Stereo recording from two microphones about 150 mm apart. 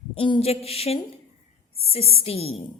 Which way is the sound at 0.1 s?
35° left (ahead or behind).